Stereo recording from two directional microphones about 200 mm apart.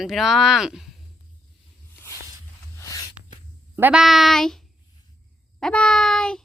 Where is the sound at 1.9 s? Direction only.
15° left (ahead or behind).